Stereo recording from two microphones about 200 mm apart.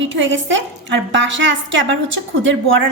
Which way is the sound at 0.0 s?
70° right (ahead or behind).